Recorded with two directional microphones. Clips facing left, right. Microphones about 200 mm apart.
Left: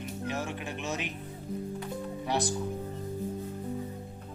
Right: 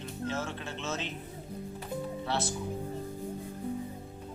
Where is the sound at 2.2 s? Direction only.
15° left (ahead or behind).